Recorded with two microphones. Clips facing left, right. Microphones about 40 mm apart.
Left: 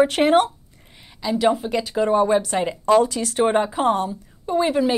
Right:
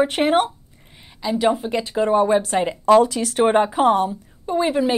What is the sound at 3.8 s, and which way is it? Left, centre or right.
Speech, right.